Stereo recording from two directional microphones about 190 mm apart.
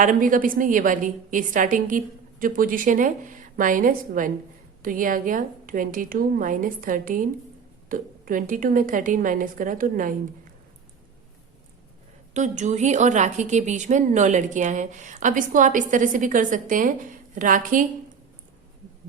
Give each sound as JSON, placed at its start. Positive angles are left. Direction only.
{"t": 0.0, "sound": "a woman's voice", "side_deg": -45}
{"t": 12.3, "sound": "a woman's voice", "side_deg": -40}